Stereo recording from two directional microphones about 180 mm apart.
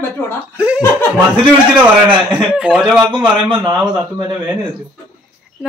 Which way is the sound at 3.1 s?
30° right (ahead or behind).